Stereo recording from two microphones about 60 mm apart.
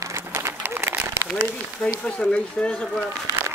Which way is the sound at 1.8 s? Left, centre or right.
Centre.